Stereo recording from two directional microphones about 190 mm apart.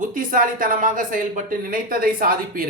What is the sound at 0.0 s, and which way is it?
Speech, 45° right (ahead or behind).